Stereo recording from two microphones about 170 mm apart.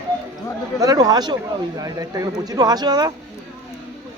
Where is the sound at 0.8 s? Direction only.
20° right (ahead or behind).